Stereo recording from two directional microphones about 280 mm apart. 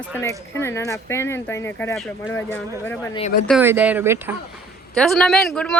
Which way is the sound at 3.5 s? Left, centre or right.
Centre.